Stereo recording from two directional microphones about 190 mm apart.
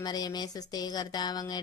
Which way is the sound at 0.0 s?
20° left (ahead or behind).